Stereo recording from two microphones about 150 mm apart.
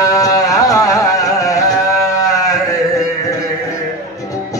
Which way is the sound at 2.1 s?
25° left (ahead or behind).